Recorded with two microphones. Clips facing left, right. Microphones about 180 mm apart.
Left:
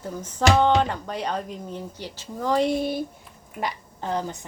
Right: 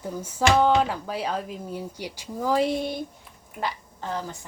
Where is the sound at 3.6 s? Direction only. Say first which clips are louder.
Left 1 dB; 15° left (ahead or behind).